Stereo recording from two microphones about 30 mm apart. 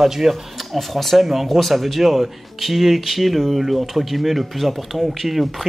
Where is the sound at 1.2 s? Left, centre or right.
Centre.